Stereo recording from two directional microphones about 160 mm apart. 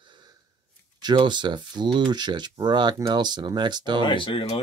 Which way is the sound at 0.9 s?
25° right (ahead or behind).